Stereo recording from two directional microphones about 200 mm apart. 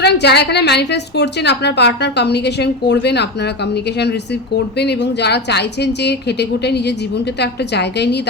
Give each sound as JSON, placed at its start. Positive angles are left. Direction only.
{"t": 0.0, "sound": "a woman's voice", "side_deg": 55}